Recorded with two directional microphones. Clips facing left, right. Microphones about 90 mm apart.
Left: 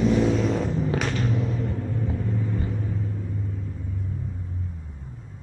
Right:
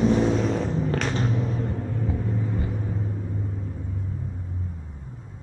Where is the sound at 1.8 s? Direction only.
10° right (ahead or behind).